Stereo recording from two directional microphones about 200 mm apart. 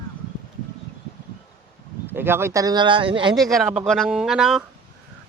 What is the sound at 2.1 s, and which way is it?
Speech, 10° right (ahead or behind).